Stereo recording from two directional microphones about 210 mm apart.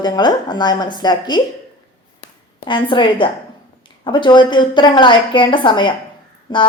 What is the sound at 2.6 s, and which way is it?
A woman's voice, 25° left (ahead or behind).